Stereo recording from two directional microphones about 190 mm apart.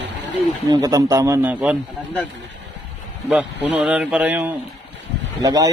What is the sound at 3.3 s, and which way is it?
Speech, 10° right (ahead or behind).